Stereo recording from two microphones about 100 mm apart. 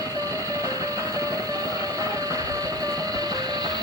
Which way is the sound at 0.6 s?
35° right (ahead or behind).